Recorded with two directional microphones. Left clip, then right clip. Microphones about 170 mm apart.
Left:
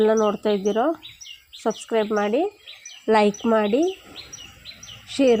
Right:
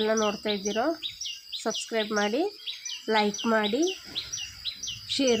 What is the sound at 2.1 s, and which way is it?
Speech, 15° left (ahead or behind).